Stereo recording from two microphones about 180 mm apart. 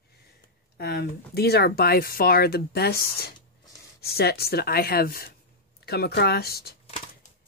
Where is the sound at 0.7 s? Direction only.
65° left (ahead or behind).